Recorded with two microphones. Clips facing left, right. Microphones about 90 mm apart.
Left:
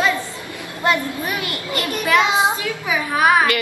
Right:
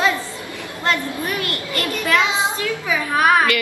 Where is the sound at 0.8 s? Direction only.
15° left (ahead or behind).